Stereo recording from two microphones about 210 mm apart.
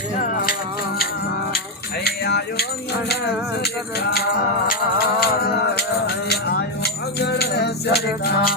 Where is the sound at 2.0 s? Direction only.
50° left (ahead or behind).